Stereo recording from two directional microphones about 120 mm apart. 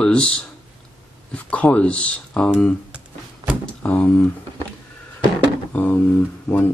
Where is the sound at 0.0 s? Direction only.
10° left (ahead or behind).